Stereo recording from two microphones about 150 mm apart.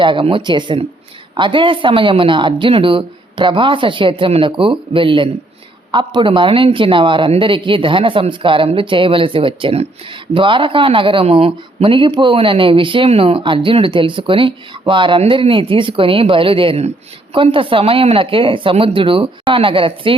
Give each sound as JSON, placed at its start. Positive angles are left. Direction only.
{"t": 0.0, "sound": "a man's voice", "side_deg": -35}